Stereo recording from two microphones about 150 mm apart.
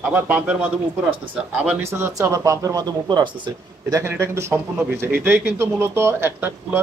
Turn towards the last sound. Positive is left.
turn(degrees=-15)  # may be behind; listen again after turning